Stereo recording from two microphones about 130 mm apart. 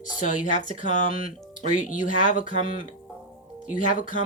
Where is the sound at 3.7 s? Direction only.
85° left.